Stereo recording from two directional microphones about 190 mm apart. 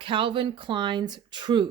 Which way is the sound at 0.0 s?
25° right (ahead or behind).